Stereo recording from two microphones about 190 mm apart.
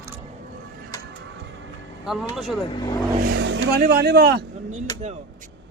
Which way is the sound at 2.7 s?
20° left (ahead or behind).